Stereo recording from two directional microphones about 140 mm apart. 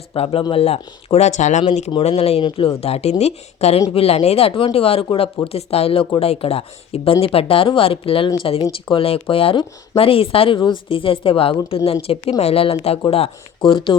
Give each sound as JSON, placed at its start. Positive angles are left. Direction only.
{"t": 0.1, "sound": "speech", "side_deg": 40}
{"t": 1.9, "sound": "speech", "side_deg": 45}